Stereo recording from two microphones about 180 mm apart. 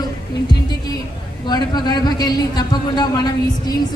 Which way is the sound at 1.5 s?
25° left (ahead or behind).